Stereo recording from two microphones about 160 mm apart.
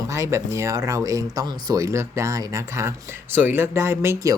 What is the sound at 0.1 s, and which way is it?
Speech, 20° right (ahead or behind).